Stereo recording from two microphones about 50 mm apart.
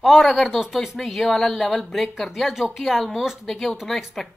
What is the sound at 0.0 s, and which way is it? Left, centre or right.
Speech, centre.